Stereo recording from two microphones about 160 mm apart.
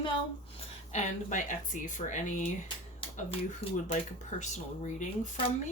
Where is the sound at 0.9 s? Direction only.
50° left (ahead or behind).